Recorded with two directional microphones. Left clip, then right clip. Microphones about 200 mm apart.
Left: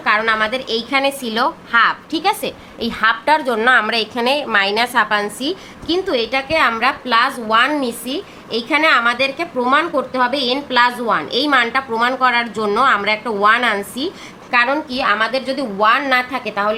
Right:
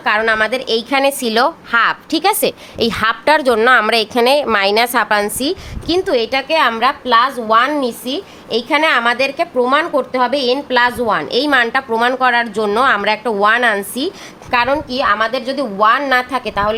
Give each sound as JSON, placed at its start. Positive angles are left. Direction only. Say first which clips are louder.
{"t": 0.0, "sound": "a woman's voice", "louder": "right 2 dB", "side_deg": -50}